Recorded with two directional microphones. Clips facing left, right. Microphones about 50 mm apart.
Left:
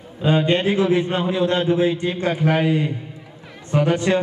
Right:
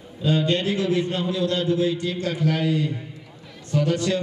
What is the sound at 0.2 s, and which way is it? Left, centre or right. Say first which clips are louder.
A man's voice: left 4 dB; left.